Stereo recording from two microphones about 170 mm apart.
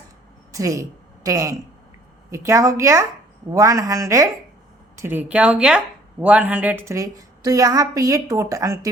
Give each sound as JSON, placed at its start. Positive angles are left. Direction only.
{"t": 0.5, "sound": "a woman's voice", "side_deg": -20}